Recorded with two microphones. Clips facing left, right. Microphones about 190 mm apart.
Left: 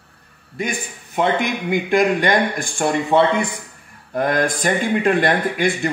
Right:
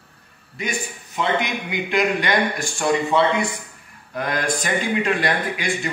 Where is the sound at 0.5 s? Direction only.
50° left (ahead or behind).